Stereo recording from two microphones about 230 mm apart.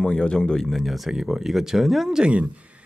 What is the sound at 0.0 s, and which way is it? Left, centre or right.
Speech, centre.